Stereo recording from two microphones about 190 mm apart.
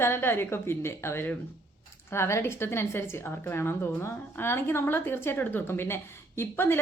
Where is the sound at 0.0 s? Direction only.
10° left (ahead or behind).